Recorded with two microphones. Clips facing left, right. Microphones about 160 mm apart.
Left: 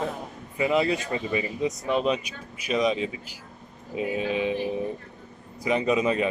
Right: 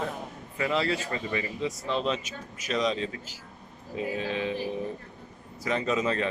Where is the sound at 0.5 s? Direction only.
15° left (ahead or behind).